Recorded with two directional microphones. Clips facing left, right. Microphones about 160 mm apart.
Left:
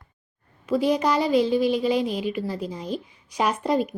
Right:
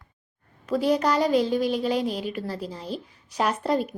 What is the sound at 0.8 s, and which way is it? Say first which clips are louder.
Speech: even; 10° left (ahead or behind).